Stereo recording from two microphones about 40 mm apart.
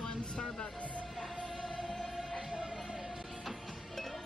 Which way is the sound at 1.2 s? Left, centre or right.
Centre.